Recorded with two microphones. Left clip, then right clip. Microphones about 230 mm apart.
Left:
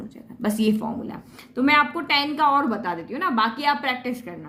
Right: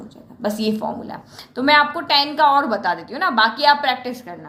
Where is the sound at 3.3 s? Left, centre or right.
Left.